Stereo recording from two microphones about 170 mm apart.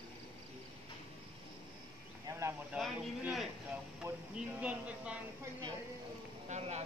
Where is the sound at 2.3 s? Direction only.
15° right (ahead or behind).